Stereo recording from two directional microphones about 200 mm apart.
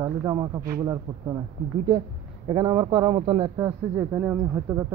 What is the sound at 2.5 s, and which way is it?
A man's voice, 20° right (ahead or behind).